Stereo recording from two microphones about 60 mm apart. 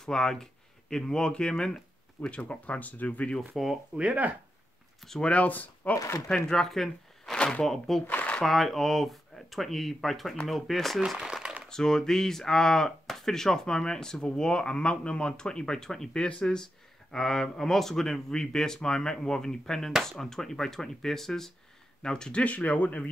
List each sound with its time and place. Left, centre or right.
0.0 s speech: centre
3.6 s speech: centre
3.9 s speech: right
5.0 s speech: centre
5.3 s speech: left
6.3 s speech: centre
7.3 s a sound: centre
7.6 s speech: centre
8.1 s shuffling cards: left
8.4 s speech: centre
11.1 s a sound: centre
11.7 s speech: centre